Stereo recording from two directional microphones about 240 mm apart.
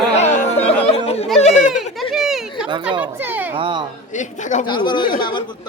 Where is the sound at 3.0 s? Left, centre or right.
Centre.